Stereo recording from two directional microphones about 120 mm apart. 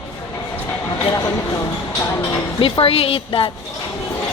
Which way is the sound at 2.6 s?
50° left (ahead or behind).